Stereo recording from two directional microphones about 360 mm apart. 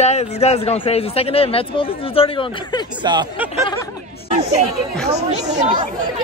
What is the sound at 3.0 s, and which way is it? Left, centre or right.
Speech, centre.